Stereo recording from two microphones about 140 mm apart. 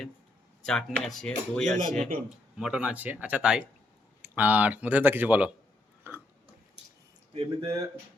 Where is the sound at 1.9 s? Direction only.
80° right.